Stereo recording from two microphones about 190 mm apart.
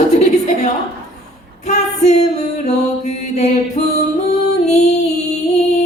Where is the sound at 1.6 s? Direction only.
35° left (ahead or behind).